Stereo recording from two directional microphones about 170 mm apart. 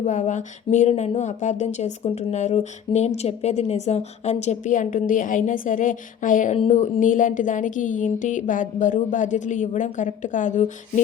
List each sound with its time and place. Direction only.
0.0 s speech: 45° left (ahead or behind)